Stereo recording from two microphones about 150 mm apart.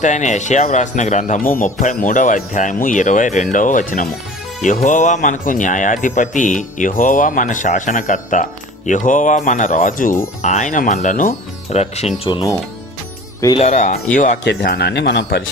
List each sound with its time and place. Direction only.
0.0 s speech: 55° left (ahead or behind)
12.3 s speech: 30° left (ahead or behind)
13.6 s speech: 50° left (ahead or behind)
14.2 s speech: 75° left (ahead or behind); by 15.4 s 90° left